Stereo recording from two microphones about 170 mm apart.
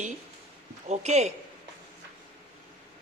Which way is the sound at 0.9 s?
40° right (ahead or behind).